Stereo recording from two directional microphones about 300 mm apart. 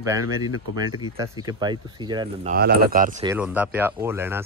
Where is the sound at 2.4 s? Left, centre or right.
Right.